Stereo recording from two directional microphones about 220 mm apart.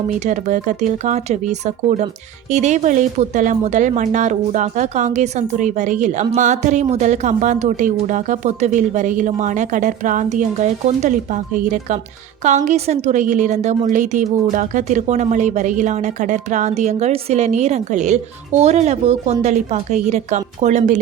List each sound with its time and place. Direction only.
0.3 s speech: 35° right (ahead or behind)